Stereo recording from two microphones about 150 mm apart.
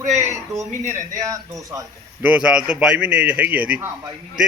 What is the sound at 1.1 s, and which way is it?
Speech, 20° right (ahead or behind).